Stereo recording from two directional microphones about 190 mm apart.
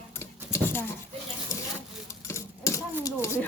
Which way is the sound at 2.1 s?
15° left (ahead or behind).